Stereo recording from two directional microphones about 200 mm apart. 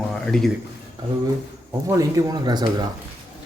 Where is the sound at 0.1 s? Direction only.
Centre (ahead or behind).